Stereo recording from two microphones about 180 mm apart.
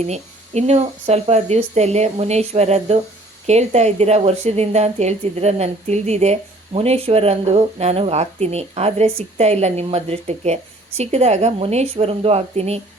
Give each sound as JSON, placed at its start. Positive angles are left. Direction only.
{"t": 0.0, "sound": "a woman's voice", "side_deg": -40}